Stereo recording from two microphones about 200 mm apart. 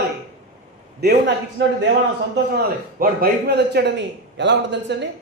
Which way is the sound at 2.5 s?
50° right (ahead or behind).